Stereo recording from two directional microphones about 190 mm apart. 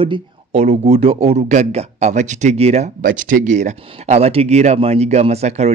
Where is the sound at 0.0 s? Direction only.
30° right (ahead or behind).